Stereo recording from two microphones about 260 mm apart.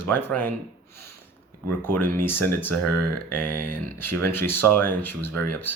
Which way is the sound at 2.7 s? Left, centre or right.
Right.